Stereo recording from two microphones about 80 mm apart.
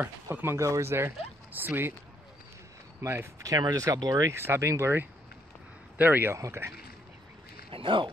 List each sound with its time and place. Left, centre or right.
0.0 s speech: right
3.0 s speech: right
3.4 s speech: right
4.3 s speech: right
5.9 s speech: right
6.3 s speech: right
7.8 s speech: right